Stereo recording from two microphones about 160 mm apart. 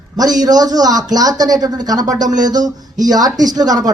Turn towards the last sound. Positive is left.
turn(degrees=-25)  # may be behind; listen again after turning